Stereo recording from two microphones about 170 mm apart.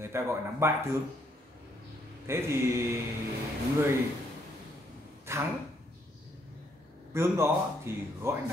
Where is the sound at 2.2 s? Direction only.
15° right (ahead or behind).